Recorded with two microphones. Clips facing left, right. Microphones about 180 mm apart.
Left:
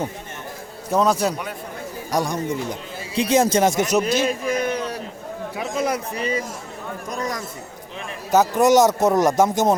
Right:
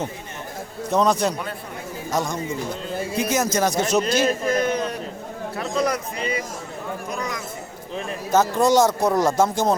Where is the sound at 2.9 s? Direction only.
50° right (ahead or behind).